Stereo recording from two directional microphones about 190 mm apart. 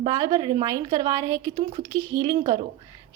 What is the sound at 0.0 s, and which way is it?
A woman's voice, 20° right (ahead or behind).